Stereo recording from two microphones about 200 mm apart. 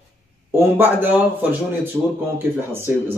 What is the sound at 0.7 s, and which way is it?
Speech, 10° right (ahead or behind).